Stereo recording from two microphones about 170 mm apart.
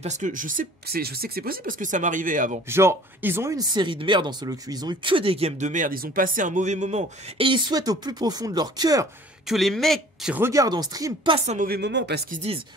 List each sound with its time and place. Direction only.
0.0 s speech: 50° right (ahead or behind)
2.7 s speech: 15° right (ahead or behind)
9.5 s speech: centre (ahead or behind)
10.3 s speech: 15° right (ahead or behind)
11.3 s a woman's voice: 40° right (ahead or behind)
11.6 s speech: 70° right (ahead or behind)